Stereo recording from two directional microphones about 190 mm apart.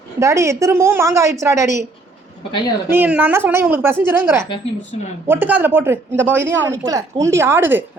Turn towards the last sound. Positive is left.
turn(degrees=-10)  # may be behind; listen again after turning